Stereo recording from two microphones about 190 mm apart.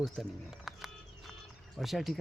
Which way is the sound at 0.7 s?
Centre (ahead or behind).